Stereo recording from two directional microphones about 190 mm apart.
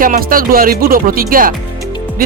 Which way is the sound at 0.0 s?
50° right (ahead or behind).